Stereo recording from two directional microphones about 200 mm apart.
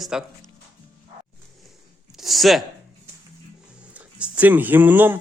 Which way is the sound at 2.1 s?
Centre (ahead or behind).